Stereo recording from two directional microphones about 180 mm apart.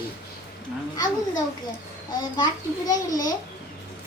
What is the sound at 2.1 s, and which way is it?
A child's voice, 20° left (ahead or behind).